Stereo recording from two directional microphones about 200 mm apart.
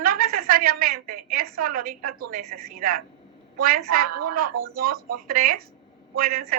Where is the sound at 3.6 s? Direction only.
45° right (ahead or behind).